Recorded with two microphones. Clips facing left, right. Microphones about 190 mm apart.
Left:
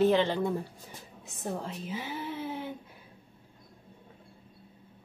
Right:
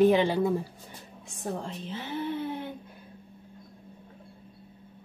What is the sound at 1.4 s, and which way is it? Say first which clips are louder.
Speech: right 1 dB; 5° left (ahead or behind).